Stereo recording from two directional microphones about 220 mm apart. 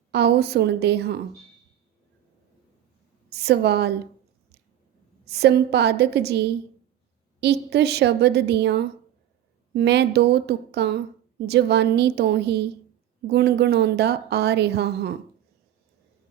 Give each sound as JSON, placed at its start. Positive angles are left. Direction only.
{"t": 0.1, "sound": "a woman's voice", "side_deg": -50}
{"t": 3.2, "sound": "a woman's voice", "side_deg": -50}
{"t": 5.2, "sound": "a woman's voice", "side_deg": -50}